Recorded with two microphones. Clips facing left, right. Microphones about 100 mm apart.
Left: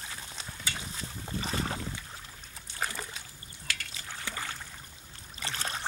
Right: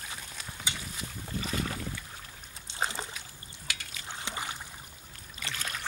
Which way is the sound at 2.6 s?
20° right (ahead or behind).